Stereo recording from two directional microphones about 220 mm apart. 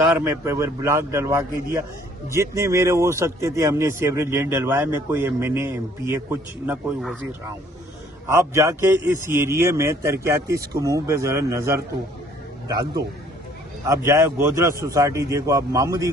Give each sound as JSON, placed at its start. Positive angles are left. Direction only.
{"t": 0.3, "sound": "speech", "side_deg": -10}
{"t": 8.4, "sound": "speech", "side_deg": -10}